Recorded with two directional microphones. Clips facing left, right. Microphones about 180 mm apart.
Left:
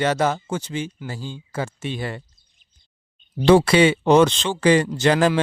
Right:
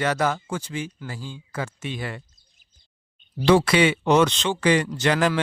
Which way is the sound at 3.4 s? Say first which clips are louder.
Left 3 dB; 30° left (ahead or behind).